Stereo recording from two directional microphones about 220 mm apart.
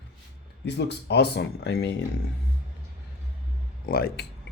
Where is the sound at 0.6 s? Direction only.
50° left (ahead or behind).